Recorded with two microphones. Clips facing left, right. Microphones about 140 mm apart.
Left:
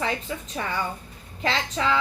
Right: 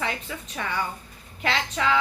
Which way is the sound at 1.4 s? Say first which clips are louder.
Even; 35° left (ahead or behind).